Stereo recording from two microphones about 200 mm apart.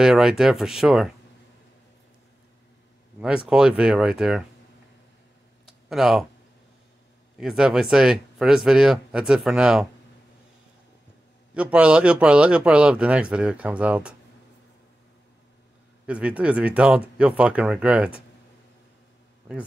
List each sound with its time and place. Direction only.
0.0 s a man's voice: 5° right (ahead or behind)
3.2 s a man's voice: 5° right (ahead or behind)
5.9 s speech: centre (ahead or behind)
7.3 s a man's voice: 5° right (ahead or behind)
11.5 s a man's voice: 5° right (ahead or behind)
16.1 s a man's voice: 5° right (ahead or behind)